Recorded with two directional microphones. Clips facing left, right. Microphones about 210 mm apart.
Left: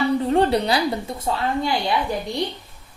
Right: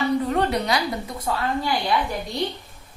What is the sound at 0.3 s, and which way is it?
A woman's voice, 30° left (ahead or behind).